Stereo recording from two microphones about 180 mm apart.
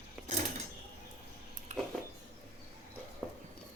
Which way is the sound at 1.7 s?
40° right (ahead or behind).